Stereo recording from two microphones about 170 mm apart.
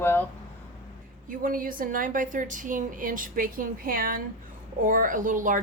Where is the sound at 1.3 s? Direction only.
55° right (ahead or behind).